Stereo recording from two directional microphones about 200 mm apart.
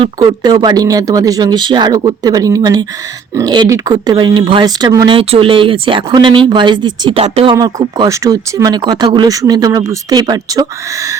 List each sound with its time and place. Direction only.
0.0 s speech: 20° right (ahead or behind)
7.5 s speech: 15° right (ahead or behind)